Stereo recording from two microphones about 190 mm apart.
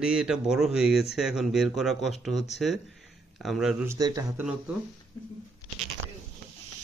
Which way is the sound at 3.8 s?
15° right (ahead or behind).